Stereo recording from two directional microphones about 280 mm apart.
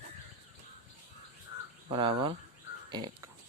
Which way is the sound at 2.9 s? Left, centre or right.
Centre.